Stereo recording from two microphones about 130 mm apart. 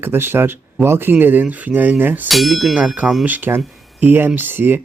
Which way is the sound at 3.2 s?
15° right (ahead or behind).